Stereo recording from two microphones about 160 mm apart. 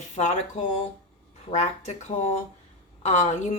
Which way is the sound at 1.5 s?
45° left (ahead or behind).